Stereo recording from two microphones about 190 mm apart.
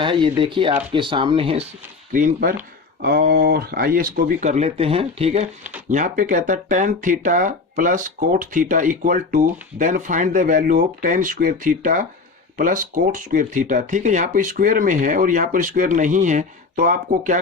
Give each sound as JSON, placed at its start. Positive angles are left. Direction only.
{"t": 0.0, "sound": "speech", "side_deg": -25}
{"t": 2.1, "sound": "speech", "side_deg": -45}